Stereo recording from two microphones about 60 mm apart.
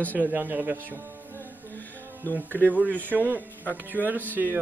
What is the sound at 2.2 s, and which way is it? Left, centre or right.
Speech, left.